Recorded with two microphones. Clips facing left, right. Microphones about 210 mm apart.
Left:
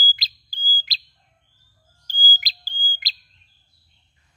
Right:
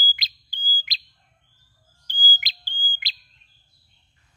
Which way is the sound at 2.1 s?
40° left (ahead or behind).